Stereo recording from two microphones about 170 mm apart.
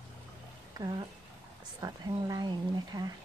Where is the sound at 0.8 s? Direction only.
25° right (ahead or behind).